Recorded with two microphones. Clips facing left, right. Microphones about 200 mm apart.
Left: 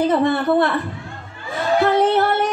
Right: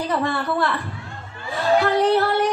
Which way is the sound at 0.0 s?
25° left (ahead or behind).